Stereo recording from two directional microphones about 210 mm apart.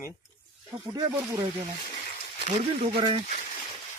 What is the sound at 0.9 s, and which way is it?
Speech, 15° right (ahead or behind).